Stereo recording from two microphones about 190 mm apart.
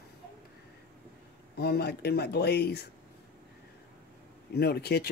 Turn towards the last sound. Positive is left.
turn(degrees=60)  # may be behind; listen again after turning